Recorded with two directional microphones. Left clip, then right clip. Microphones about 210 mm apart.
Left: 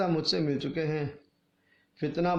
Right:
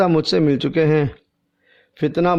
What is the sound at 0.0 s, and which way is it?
A man's voice, 45° right (ahead or behind).